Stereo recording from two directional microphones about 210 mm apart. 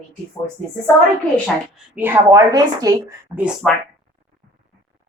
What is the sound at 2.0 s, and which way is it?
Speech, 15° right (ahead or behind).